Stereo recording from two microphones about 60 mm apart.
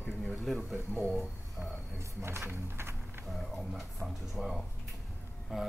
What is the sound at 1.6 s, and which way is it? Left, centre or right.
Speech, right.